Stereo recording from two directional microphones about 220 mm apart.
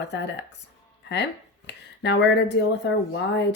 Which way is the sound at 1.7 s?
50° left (ahead or behind).